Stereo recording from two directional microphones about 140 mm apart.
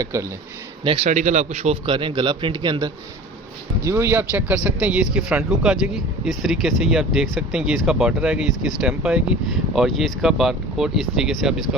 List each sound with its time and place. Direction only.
0.0 s speech: 20° right (ahead or behind)
1.0 s a man's voice: 60° right (ahead or behind); by 2.9 s 30° right (ahead or behind)
3.8 s speech: 20° right (ahead or behind); by 11.8 s 5° right (ahead or behind)